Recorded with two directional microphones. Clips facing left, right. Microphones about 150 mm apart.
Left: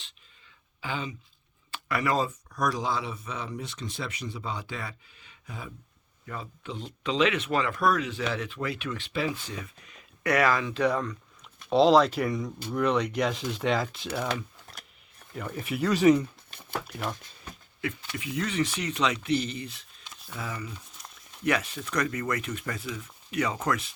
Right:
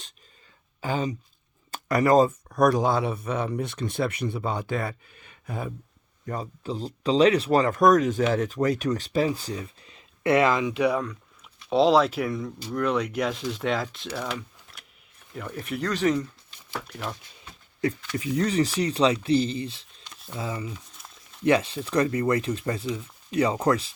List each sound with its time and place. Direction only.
0.8 s speech: 40° right (ahead or behind)
6.2 s speech: 40° right (ahead or behind); by 14.1 s centre (ahead or behind)
15.3 s speech: centre (ahead or behind)
16.5 s a sound: 60° left (ahead or behind)
16.8 s speech: 5° left (ahead or behind)
18.1 s speech: 35° right (ahead or behind)
20.1 s camera: centre (ahead or behind)
20.3 s speech: 25° right (ahead or behind)
21.0 s a sound: 5° right (ahead or behind)
21.4 s speech: 30° right (ahead or behind)